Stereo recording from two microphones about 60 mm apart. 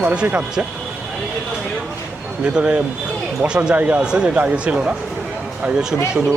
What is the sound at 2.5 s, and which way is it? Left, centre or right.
Speech, centre.